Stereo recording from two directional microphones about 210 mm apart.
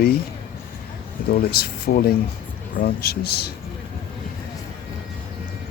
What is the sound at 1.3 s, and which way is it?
A man's voice, 45° left (ahead or behind).